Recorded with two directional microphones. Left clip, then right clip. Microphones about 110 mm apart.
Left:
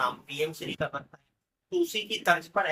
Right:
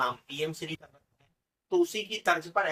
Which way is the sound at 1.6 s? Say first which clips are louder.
Right 1 dB; 15° left (ahead or behind).